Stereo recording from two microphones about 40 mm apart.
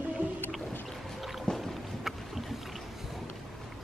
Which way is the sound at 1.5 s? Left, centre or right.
Centre.